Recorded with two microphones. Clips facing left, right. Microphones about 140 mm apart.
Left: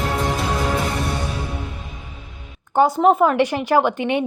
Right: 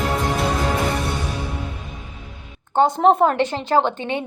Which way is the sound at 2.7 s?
5° left (ahead or behind).